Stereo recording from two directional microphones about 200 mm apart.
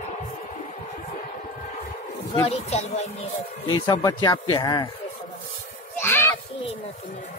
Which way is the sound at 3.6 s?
20° left (ahead or behind).